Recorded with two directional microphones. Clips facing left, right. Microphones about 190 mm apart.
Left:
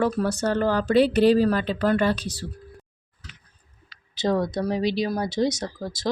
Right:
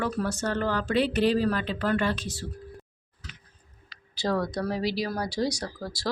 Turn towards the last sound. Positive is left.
turn(degrees=20)  # may be behind; listen again after turning